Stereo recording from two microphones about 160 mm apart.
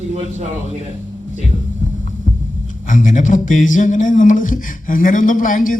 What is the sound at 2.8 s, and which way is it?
Speech, 50° left (ahead or behind).